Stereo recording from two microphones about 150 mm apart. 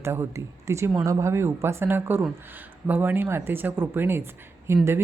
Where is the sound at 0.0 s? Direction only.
15° right (ahead or behind).